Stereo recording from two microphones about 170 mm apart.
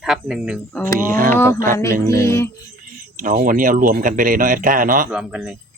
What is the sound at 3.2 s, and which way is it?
Speech, 50° right (ahead or behind).